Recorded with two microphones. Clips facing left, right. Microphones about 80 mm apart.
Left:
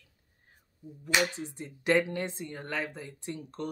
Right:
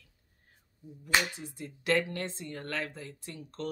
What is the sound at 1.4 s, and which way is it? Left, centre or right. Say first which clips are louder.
Speech: left 2 dB; left.